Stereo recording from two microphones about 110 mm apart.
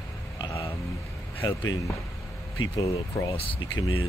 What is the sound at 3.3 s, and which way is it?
Speech, 55° left (ahead or behind).